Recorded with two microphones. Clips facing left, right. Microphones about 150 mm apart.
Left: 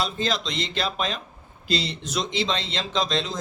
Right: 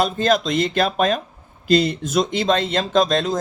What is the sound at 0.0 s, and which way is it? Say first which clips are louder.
Speech: right 8 dB; 55° right (ahead or behind).